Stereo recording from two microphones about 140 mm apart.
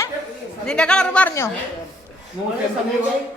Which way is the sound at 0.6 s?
5° left (ahead or behind).